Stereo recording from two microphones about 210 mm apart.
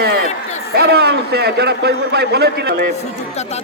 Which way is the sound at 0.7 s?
50° right (ahead or behind).